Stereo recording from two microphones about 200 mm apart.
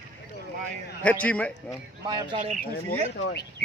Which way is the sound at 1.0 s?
5° left (ahead or behind).